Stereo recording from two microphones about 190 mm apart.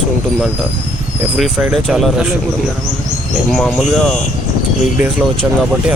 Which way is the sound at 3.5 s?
5° left (ahead or behind).